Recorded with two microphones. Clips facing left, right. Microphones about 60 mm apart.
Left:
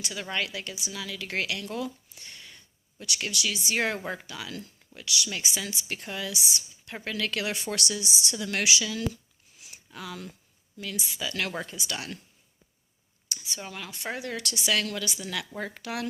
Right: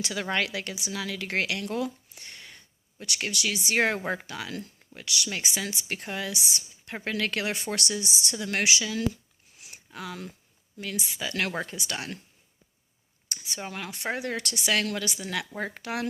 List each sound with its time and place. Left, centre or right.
0.0 s a woman's voice: right
9.6 s a sound: right
10.9 s speech: right
13.2 s speech: right